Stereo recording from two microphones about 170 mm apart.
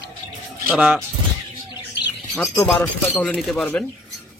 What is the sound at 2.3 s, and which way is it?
Speech, 5° left (ahead or behind).